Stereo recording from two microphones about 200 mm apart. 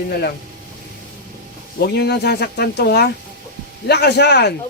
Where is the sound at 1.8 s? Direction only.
55° left (ahead or behind).